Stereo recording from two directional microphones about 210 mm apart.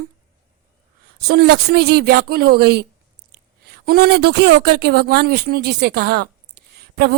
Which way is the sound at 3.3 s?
50° right (ahead or behind).